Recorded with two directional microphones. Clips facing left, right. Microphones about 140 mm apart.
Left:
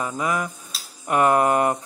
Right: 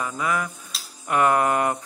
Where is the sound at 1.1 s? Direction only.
25° left (ahead or behind).